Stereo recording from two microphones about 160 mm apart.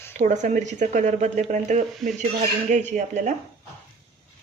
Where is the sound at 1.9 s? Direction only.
Centre (ahead or behind).